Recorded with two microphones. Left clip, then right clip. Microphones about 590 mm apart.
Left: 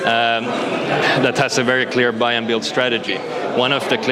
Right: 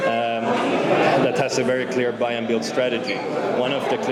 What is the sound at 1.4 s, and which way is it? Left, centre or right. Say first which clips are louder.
A man's voice: left 4 dB; left.